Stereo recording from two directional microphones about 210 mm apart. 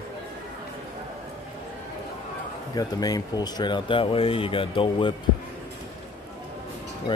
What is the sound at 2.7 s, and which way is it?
Speech, 20° left (ahead or behind).